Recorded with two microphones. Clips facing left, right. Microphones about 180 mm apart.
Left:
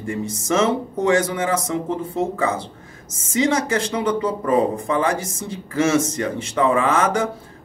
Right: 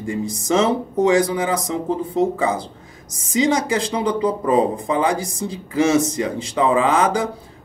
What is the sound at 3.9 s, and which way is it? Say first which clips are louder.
Speech: right 1 dB; 15° right (ahead or behind).